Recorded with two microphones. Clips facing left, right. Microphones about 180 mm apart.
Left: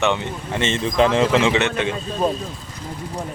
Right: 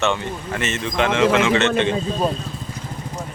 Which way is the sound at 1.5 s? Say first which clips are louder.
Right 3 dB; 15° left (ahead or behind).